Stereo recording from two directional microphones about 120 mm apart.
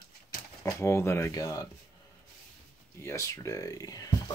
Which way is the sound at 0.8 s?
25° left (ahead or behind).